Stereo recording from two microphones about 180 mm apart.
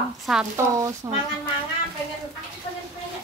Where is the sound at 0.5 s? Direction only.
15° right (ahead or behind).